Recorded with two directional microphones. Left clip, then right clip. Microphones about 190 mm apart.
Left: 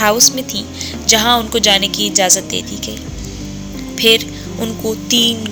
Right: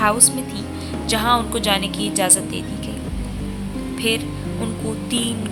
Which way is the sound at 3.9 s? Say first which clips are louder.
Left 11 dB; 35° left (ahead or behind).